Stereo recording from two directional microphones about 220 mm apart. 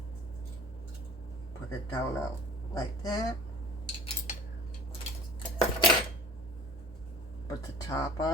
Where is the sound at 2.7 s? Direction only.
15° left (ahead or behind).